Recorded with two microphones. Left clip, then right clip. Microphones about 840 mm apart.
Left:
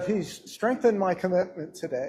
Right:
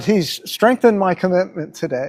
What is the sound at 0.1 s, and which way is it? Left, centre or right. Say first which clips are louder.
Speech: right 12 dB; right.